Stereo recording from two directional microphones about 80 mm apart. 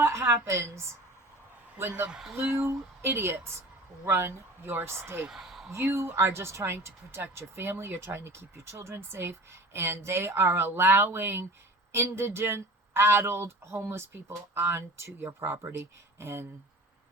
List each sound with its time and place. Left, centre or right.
0.0 s a woman's voice: right
2.0 s speech: centre
2.3 s speech: right
5.3 s a sound: centre
5.7 s speech: right